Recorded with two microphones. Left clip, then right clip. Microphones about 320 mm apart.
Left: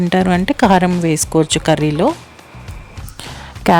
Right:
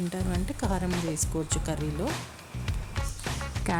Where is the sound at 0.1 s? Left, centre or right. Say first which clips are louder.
Left 19 dB; right.